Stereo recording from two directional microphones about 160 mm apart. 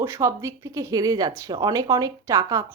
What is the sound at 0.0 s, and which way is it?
A woman's voice, 20° right (ahead or behind).